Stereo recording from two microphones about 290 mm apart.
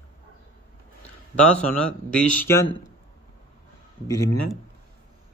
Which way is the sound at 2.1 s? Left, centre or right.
Centre.